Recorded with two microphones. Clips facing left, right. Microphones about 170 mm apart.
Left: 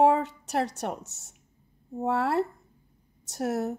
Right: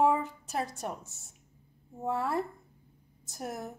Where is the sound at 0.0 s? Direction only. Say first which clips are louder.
Left 5 dB; 75° left (ahead or behind).